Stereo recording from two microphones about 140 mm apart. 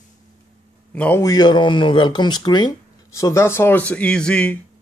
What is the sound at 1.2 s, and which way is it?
Speech, 30° left (ahead or behind).